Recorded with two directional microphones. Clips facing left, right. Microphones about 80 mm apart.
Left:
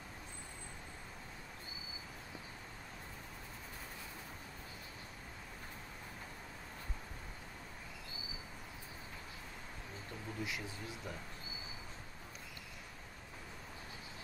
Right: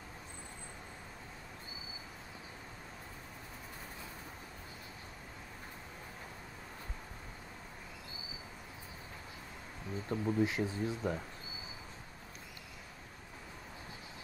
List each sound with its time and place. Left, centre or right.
10.0 s speech: right